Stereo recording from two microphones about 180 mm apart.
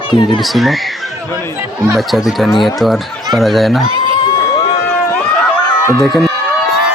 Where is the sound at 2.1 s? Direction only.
Centre (ahead or behind).